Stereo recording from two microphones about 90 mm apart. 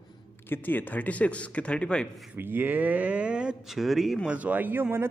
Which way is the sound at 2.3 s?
20° right (ahead or behind).